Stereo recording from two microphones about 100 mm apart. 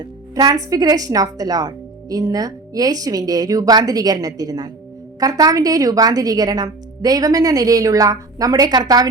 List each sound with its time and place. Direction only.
0.3 s a woman's voice: 40° right (ahead or behind)